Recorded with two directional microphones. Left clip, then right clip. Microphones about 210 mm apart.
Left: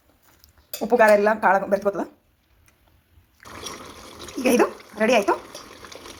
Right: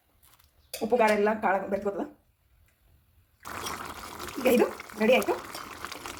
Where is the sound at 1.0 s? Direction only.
25° left (ahead or behind).